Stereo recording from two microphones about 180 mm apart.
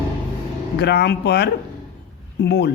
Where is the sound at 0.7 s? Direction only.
65° left (ahead or behind).